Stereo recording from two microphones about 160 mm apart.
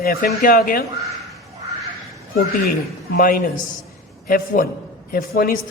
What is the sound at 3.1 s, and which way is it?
A man's voice, 60° left (ahead or behind).